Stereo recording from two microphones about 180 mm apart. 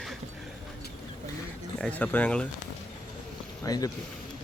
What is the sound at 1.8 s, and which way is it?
Speech, 10° left (ahead or behind).